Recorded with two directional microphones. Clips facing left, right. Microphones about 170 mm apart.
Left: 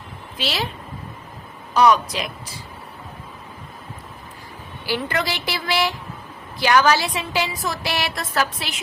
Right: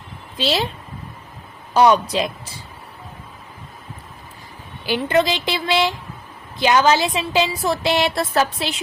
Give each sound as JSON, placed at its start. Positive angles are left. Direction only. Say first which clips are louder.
{"t": 0.3, "sound": "a woman's voice", "louder": "right 5 dB", "side_deg": -25}
{"t": 1.7, "sound": "a woman's voice", "louder": "right 2 dB", "side_deg": -30}
{"t": 4.9, "sound": "a woman's voice", "louder": "right 6 dB", "side_deg": -25}